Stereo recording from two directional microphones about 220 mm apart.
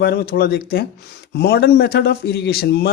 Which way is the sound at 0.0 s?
45° left (ahead or behind).